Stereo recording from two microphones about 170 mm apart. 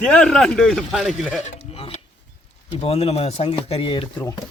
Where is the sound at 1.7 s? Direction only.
35° left (ahead or behind).